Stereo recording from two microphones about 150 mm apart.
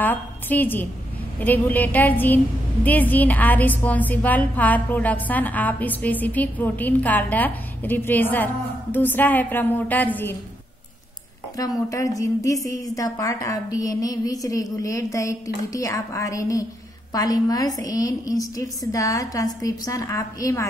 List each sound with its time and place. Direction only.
0.0 s a woman's voice: 10° left (ahead or behind)
11.9 s a woman's voice: 20° left (ahead or behind)